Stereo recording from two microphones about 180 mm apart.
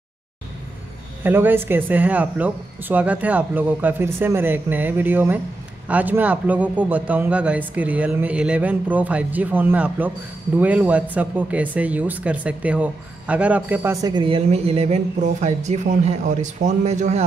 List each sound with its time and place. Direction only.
1.2 s a man's voice: 10° right (ahead or behind)
14.1 s speech: 30° right (ahead or behind)